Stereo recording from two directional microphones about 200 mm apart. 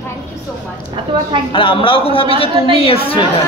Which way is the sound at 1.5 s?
25° left (ahead or behind).